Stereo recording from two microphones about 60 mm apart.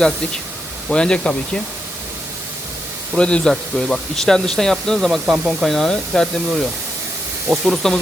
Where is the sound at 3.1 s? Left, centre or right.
Centre.